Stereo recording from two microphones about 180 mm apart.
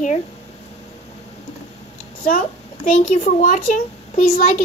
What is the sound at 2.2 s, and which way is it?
A child's voice, 50° left (ahead or behind).